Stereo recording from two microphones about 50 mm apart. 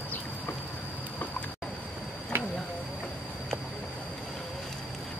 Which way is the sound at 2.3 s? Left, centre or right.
Right.